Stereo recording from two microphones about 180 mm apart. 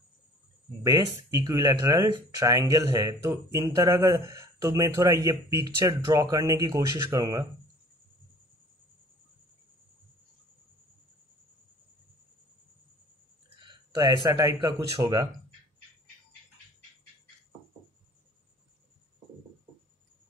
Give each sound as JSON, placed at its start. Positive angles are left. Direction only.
{"t": 0.8, "sound": "speech", "side_deg": -20}
{"t": 13.6, "sound": "speech", "side_deg": -25}